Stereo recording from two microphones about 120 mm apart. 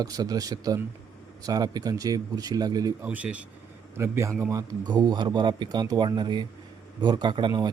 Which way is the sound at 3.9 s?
25° right (ahead or behind).